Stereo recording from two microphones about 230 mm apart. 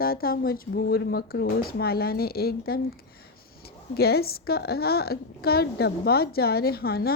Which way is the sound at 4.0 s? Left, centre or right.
Left.